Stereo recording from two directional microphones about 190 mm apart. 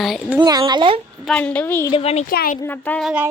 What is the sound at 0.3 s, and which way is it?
Speech, 20° right (ahead or behind).